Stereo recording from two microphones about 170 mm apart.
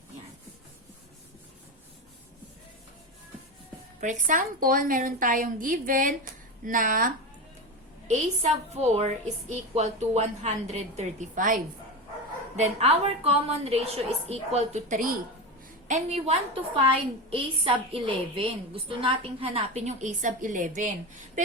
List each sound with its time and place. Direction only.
4.0 s a woman's voice: 50° right (ahead or behind)
8.4 s a woman's voice: 40° right (ahead or behind)
12.5 s a woman's voice: 35° right (ahead or behind); by 15.2 s 55° right (ahead or behind)
15.9 s a woman's voice: 40° right (ahead or behind)